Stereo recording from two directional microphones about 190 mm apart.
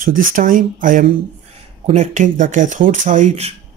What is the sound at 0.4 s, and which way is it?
Speech, 45° right (ahead or behind).